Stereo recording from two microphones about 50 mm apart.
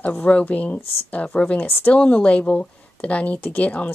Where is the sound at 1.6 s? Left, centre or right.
Left.